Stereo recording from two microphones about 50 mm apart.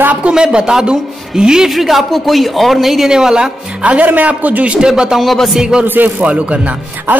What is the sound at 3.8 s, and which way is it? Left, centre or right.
Speech, right.